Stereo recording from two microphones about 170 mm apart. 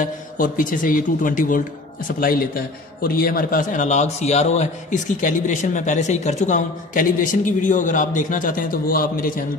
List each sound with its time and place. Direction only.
0.0 s a man's voice: 55° left (ahead or behind)